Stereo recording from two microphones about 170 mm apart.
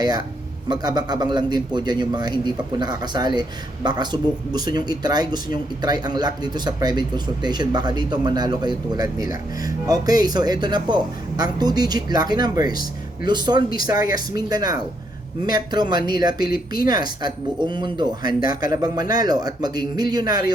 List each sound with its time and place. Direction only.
0.0 s speech: 25° right (ahead or behind)